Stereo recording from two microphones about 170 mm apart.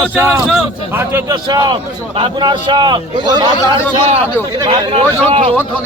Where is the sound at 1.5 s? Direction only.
25° right (ahead or behind).